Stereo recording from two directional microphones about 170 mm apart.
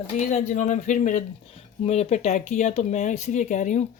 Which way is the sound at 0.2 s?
45° left (ahead or behind).